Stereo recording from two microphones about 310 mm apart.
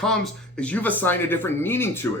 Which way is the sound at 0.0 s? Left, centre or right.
Centre.